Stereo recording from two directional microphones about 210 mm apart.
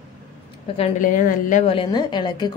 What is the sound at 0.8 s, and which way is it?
Speech, 40° left (ahead or behind).